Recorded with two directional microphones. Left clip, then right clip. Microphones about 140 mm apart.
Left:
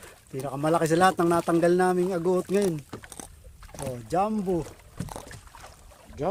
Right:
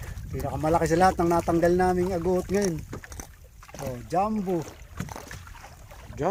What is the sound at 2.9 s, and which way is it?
Rowboat, 40° left (ahead or behind).